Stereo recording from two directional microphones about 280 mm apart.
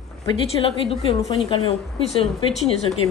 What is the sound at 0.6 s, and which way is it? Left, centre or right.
Speech, centre.